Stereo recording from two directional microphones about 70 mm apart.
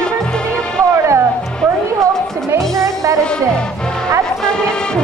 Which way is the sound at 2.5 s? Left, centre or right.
Right.